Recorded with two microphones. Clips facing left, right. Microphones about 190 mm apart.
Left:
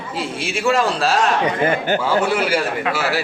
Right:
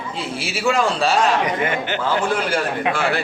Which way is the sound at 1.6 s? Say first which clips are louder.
Left 4 dB; 35° left (ahead or behind).